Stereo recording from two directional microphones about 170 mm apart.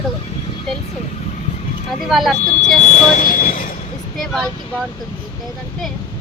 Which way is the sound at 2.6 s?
45° left (ahead or behind).